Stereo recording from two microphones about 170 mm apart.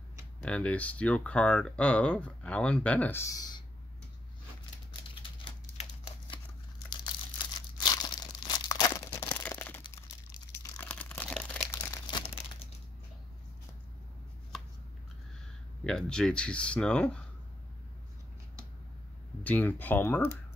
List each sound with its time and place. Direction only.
0.4 s speech: 5° left (ahead or behind)
5.4 s typewriter: 30° left (ahead or behind)
6.9 s crumpling: 25° left (ahead or behind)
10.5 s crunch: 15° left (ahead or behind)
10.9 s crumpling: 10° left (ahead or behind); by 12.6 s 25° left (ahead or behind)
15.8 s speech: 5° left (ahead or behind)
19.4 s speech: 10° left (ahead or behind)